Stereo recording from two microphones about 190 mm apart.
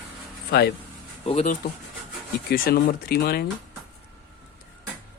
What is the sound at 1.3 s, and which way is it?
Speech, 35° left (ahead or behind).